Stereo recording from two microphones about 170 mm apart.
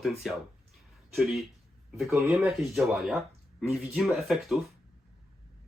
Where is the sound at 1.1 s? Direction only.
Centre (ahead or behind).